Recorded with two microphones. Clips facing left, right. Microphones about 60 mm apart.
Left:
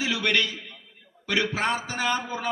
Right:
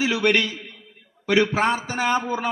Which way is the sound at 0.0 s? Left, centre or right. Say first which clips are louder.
Right 5 dB; right.